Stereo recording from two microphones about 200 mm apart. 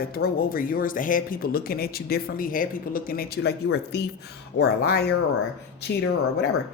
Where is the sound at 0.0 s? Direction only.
50° left (ahead or behind).